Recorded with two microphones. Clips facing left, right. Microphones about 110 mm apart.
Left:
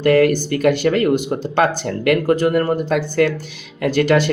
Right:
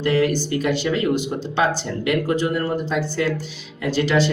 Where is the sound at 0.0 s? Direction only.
55° left (ahead or behind).